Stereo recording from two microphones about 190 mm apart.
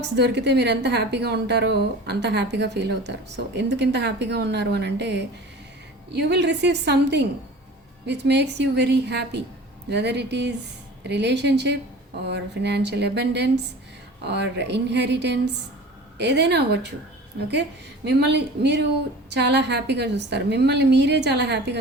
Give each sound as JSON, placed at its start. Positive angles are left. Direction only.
{"t": 0.0, "sound": "a woman's voice", "side_deg": -65}